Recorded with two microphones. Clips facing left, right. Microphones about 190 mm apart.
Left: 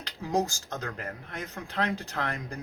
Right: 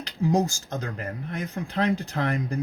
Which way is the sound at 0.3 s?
10° right (ahead or behind).